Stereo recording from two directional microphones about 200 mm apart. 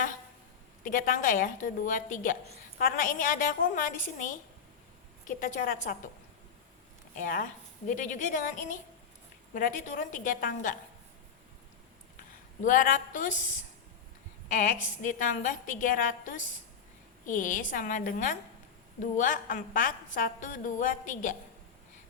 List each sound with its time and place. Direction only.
0.9 s a woman's voice: 45° left (ahead or behind)
7.2 s a woman's voice: 40° left (ahead or behind)
12.6 s a woman's voice: 40° left (ahead or behind)
14.5 s a woman's voice: 40° left (ahead or behind)